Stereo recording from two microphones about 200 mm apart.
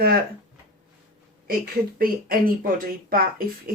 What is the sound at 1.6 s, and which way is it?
Speech, 45° right (ahead or behind).